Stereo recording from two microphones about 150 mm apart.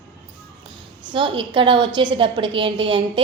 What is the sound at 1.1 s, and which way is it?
A woman's voice, 35° right (ahead or behind).